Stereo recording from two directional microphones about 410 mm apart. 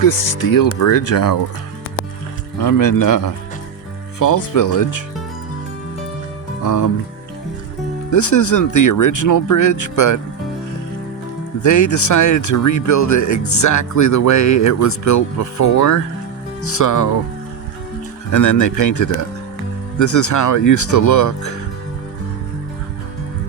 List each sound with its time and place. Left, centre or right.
0.4 s speech: left
2.6 s speech: left
4.2 s speech: left
6.6 s speech: left
8.1 s speech: left
11.6 s speech: left
18.3 s speech: left